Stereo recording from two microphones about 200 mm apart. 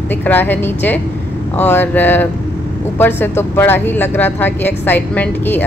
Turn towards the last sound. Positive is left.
turn(degrees=10)  # may be behind; listen again after turning